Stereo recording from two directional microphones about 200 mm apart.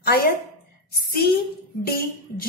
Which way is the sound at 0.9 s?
50° left (ahead or behind).